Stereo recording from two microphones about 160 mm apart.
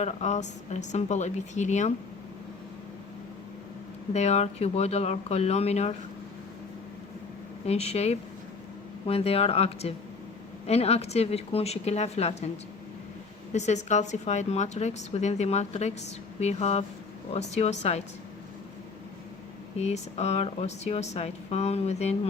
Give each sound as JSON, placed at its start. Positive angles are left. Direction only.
{"t": 0.0, "sound": "a woman's voice", "side_deg": 45}
{"t": 4.1, "sound": "speech", "side_deg": 45}
{"t": 7.7, "sound": "speech", "side_deg": 40}
{"t": 13.5, "sound": "a woman's voice", "side_deg": 45}
{"t": 19.8, "sound": "a woman's voice", "side_deg": 45}